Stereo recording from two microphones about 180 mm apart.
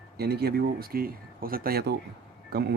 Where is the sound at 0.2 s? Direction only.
60° right (ahead or behind).